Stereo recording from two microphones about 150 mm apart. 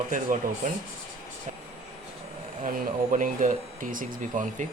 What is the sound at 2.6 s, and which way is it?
Speech, 65° right (ahead or behind).